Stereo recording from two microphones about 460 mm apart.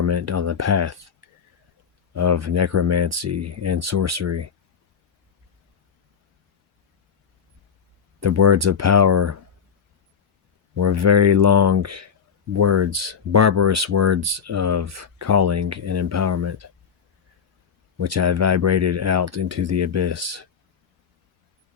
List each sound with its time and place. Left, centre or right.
0.0 s speech: right
2.1 s speech: right
8.2 s speech: right
10.8 s speech: right
17.9 s speech: right